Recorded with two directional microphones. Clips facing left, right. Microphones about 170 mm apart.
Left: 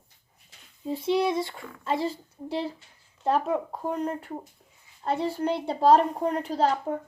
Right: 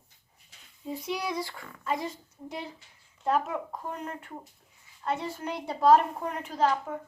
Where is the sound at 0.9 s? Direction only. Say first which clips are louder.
Left 8 dB; 30° left (ahead or behind).